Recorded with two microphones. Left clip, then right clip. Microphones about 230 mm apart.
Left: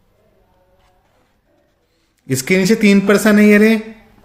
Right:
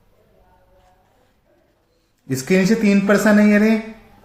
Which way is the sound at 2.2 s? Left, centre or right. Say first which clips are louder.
Left 3 dB; left.